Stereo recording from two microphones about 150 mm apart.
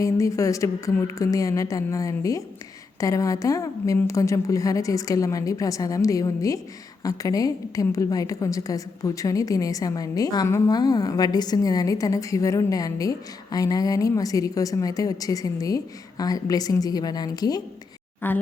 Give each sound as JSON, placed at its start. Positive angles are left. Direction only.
{"t": 0.0, "sound": "a woman's voice", "side_deg": 20}
{"t": 18.2, "sound": "speech", "side_deg": 15}